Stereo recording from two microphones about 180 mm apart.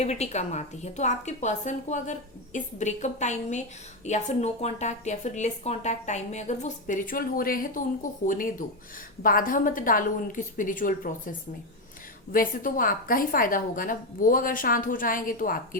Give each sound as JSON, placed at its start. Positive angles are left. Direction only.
{"t": 0.0, "sound": "a woman's voice", "side_deg": 40}